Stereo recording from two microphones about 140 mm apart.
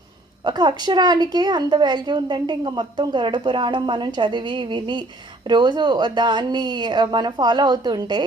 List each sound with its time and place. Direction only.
0.4 s a woman's voice: 30° right (ahead or behind)